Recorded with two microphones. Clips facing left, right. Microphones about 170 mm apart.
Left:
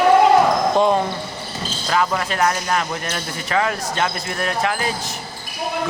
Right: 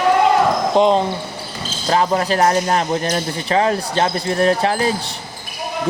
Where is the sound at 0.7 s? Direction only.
20° right (ahead or behind).